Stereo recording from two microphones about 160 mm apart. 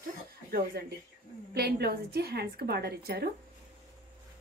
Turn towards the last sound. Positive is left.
turn(degrees=-75)  # may be behind; listen again after turning